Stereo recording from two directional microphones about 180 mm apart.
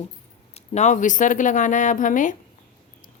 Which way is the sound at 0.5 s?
40° left (ahead or behind).